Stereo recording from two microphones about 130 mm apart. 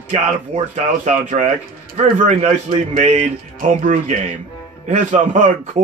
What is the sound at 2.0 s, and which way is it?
A man's voice, 60° right (ahead or behind).